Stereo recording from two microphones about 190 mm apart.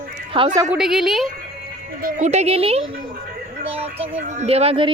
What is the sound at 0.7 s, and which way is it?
Speech, 5° right (ahead or behind).